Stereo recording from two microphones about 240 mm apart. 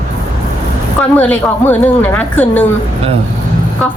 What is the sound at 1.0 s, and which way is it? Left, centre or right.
Speech, centre.